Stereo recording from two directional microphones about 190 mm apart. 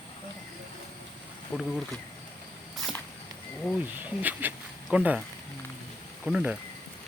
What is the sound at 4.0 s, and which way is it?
Speech, 10° right (ahead or behind).